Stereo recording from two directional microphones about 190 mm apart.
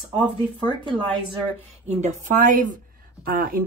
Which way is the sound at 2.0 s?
40° right (ahead or behind).